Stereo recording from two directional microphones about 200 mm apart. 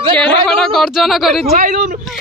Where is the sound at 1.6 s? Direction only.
40° right (ahead or behind).